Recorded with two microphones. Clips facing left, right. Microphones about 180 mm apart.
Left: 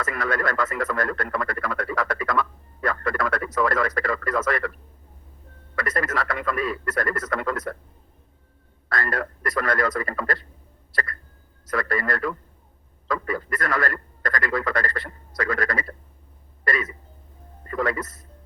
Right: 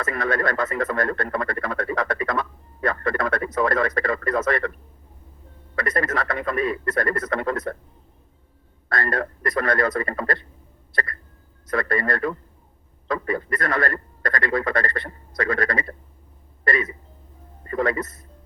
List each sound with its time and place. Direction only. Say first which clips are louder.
0.1 s speech: right 4 dB; 25° right (ahead or behind)
5.8 s speech: right 2 dB; 25° right (ahead or behind)
9.0 s speech: right 2 dB; 25° right (ahead or behind)
11.7 s speech: right 2 dB; 25° right (ahead or behind)
17.7 s speech: right 2 dB; 25° right (ahead or behind)